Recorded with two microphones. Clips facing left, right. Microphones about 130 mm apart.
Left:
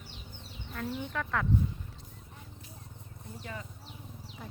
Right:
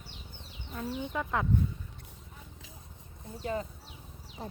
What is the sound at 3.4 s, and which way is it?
Speech, 35° right (ahead or behind).